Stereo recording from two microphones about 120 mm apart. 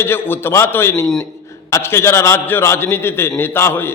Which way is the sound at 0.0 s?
20° left (ahead or behind).